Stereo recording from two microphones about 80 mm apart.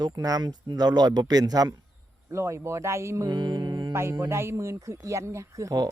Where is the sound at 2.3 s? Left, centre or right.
Right.